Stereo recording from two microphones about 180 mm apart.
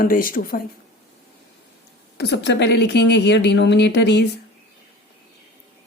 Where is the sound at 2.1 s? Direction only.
70° left (ahead or behind).